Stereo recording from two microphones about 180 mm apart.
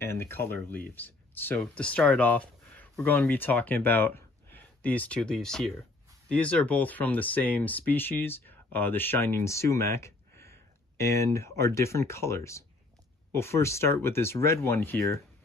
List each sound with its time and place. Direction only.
0.0 s speech: 15° left (ahead or behind)